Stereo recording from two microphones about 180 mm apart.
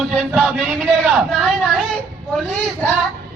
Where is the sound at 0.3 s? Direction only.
Centre (ahead or behind).